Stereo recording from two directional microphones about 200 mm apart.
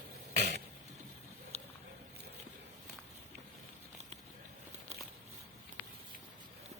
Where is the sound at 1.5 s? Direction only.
30° right (ahead or behind).